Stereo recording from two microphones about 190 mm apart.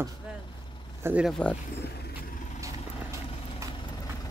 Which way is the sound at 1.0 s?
5° right (ahead or behind).